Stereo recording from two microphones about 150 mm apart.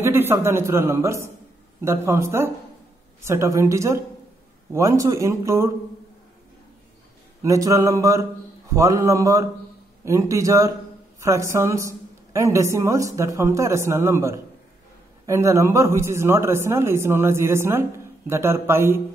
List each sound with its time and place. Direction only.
0.0 s a woman's voice: 15° right (ahead or behind)
7.4 s a woman's voice: 20° right (ahead or behind)